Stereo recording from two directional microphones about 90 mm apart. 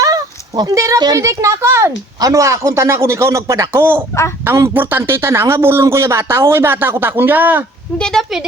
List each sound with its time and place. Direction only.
0.0 s a sound: 45° right (ahead or behind)
1.0 s a woman's voice: 40° right (ahead or behind); by 7.6 s 20° right (ahead or behind)
7.9 s speech: 10° left (ahead or behind)